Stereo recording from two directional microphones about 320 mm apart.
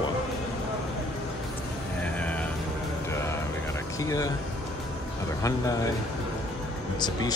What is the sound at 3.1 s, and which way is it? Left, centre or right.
Music, centre.